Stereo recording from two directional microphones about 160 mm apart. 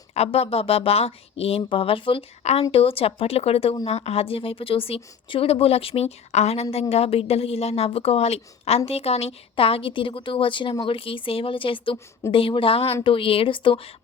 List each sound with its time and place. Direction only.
0.1 s speech: 40° left (ahead or behind)